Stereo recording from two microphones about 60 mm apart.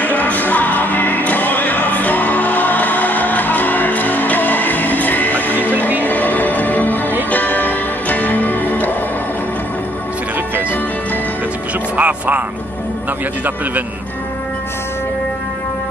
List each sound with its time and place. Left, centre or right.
0.0 s music: left
12.0 s music: right